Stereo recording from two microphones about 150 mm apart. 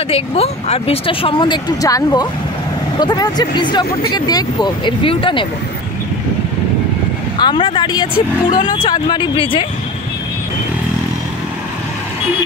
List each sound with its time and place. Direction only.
0.1 s speech: 40° left (ahead or behind)
7.3 s speech: 30° left (ahead or behind)